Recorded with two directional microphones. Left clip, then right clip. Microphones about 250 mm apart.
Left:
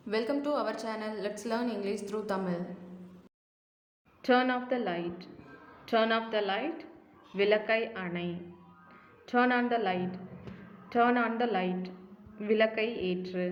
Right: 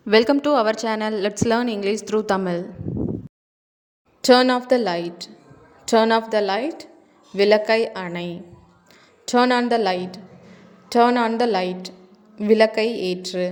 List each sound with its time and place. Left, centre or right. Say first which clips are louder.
0.1 s a woman's voice: right 14 dB; right
4.2 s a woman's voice: right 12 dB; right